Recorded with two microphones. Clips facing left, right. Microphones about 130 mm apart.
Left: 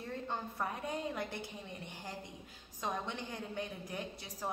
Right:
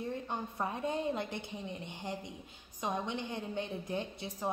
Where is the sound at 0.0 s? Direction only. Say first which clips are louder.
Right 3 dB; 20° right (ahead or behind).